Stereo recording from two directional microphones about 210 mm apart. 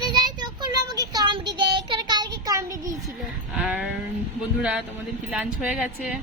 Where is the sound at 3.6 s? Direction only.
5° right (ahead or behind).